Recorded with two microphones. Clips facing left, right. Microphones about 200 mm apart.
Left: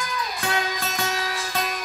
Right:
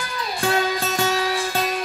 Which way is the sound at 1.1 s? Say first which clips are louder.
Right 6 dB; 30° right (ahead or behind).